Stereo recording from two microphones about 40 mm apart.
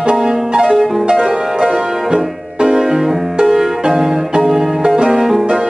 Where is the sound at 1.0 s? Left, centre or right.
Centre.